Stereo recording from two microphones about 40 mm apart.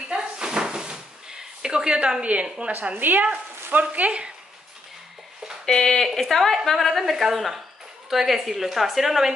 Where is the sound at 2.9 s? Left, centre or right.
Right.